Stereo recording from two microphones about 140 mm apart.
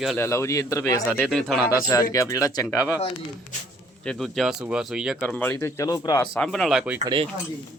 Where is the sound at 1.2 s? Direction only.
Centre (ahead or behind).